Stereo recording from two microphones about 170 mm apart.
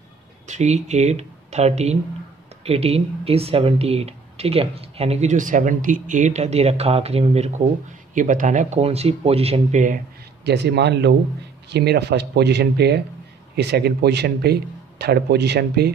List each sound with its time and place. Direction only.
0.5 s speech: 40° right (ahead or behind)
10.4 s a man's voice: 80° right